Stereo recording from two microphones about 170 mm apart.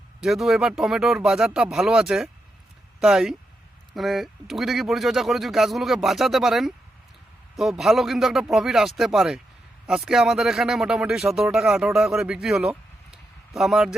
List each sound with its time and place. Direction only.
0.2 s speech: centre (ahead or behind)